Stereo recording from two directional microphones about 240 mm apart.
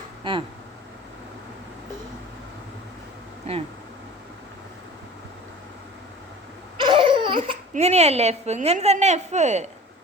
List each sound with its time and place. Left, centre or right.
6.7 s laughter: right
7.3 s speech: right